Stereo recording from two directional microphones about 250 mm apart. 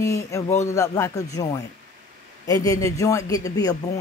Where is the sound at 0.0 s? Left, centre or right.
Centre.